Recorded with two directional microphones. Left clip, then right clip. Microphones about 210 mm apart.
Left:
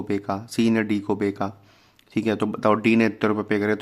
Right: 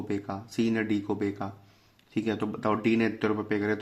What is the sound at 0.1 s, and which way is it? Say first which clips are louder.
Speech: left 9 dB; 35° left (ahead or behind).